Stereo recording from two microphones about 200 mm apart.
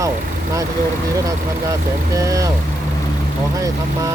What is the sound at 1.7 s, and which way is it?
Speech, 15° right (ahead or behind).